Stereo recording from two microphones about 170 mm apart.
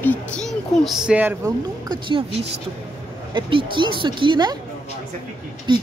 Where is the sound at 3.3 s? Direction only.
30° right (ahead or behind).